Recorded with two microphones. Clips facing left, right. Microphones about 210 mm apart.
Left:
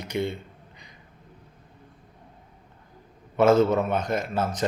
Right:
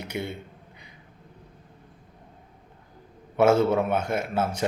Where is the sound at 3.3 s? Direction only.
10° right (ahead or behind).